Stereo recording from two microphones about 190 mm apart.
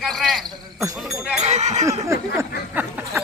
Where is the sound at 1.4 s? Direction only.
35° right (ahead or behind).